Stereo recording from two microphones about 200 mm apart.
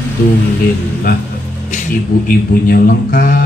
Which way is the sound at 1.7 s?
40° left (ahead or behind).